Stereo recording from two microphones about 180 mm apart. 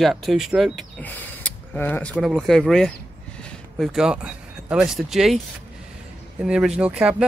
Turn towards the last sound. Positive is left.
turn(degrees=-5)  # may be behind; listen again after turning